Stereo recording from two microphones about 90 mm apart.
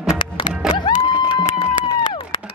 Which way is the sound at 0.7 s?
55° left (ahead or behind).